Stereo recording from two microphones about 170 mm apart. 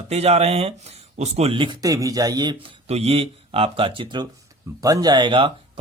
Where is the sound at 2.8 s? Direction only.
35° right (ahead or behind).